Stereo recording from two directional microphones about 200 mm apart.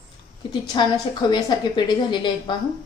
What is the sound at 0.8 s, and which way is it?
A woman's voice, 25° left (ahead or behind).